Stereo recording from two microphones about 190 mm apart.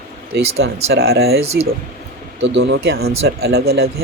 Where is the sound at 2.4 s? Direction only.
80° right; by 3.9 s 55° right (ahead or behind).